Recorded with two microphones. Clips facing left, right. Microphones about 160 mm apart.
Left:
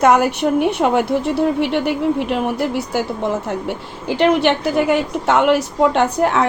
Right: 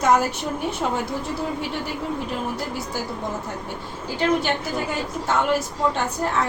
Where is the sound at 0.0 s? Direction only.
65° left (ahead or behind).